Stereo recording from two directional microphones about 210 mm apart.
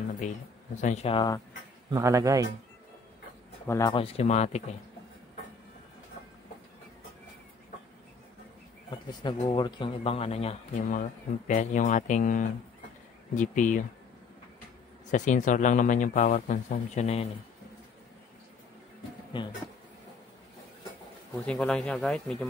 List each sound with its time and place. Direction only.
0.7 s speech: 35° left (ahead or behind)
1.9 s speech: 15° right (ahead or behind)
3.6 s speech: 15° left (ahead or behind); by 4.7 s 30° left (ahead or behind)
8.9 s speech: 20° left (ahead or behind); by 13.8 s 35° left (ahead or behind)
15.0 s speech: 35° left (ahead or behind)
21.5 s speech: 5° left (ahead or behind)